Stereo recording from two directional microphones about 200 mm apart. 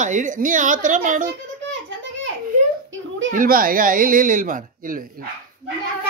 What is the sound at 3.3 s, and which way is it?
Speech, 45° right (ahead or behind).